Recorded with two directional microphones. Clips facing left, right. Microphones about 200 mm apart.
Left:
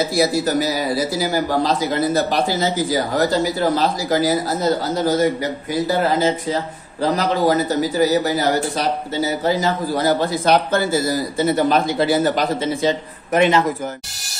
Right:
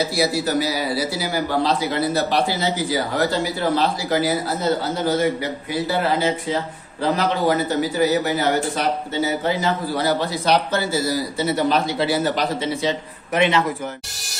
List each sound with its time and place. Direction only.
0.1 s a man's voice: 45° left (ahead or behind)